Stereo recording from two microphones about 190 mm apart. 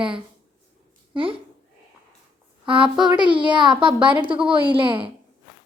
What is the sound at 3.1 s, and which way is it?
A child's voice, 25° right (ahead or behind).